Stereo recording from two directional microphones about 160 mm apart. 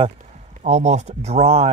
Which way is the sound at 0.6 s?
45° right (ahead or behind).